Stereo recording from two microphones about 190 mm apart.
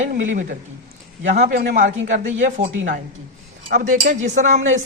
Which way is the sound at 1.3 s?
55° right (ahead or behind).